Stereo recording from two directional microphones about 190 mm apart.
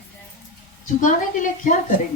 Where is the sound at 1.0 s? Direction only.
45° left (ahead or behind).